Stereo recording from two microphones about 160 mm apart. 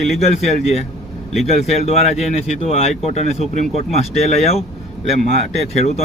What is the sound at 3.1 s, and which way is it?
Speech, 45° left (ahead or behind).